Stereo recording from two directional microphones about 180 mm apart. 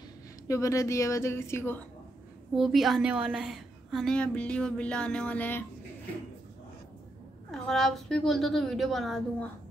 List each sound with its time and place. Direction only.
0.5 s a woman's voice: 15° left (ahead or behind)
2.5 s a woman's voice: centre (ahead or behind)
7.5 s a woman's voice: centre (ahead or behind)